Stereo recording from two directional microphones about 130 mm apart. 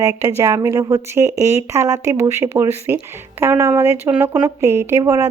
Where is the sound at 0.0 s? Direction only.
25° right (ahead or behind).